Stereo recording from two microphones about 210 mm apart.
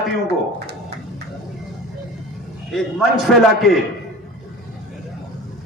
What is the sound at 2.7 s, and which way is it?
A man's voice, centre (ahead or behind).